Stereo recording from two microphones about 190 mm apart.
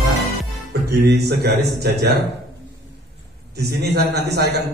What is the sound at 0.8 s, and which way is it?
A man's voice, 60° right (ahead or behind).